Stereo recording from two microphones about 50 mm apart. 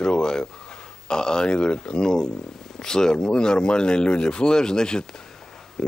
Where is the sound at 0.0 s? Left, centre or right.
Centre.